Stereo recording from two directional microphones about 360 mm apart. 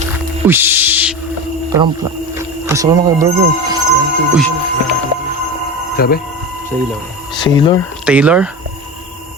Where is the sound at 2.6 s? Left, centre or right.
Centre.